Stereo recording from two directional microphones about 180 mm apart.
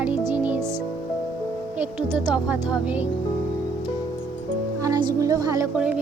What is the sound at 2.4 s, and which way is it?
Speech, 5° right (ahead or behind).